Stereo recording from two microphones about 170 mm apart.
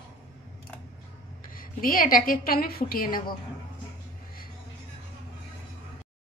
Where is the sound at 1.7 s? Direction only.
55° left (ahead or behind).